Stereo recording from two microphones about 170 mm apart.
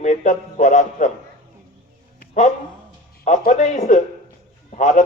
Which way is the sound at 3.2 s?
45° left (ahead or behind).